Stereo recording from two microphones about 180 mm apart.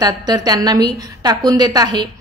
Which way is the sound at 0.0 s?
20° right (ahead or behind).